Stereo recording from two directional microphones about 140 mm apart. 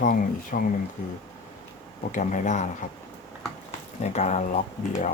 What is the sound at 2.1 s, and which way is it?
Speech, 60° left (ahead or behind).